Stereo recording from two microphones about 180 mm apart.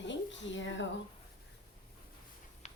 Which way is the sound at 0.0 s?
90° left.